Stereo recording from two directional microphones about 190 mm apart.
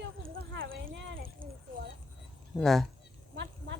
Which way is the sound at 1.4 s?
25° right (ahead or behind).